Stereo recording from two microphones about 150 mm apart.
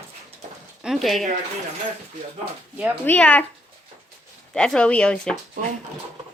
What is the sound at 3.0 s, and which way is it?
Speech, 10° left (ahead or behind).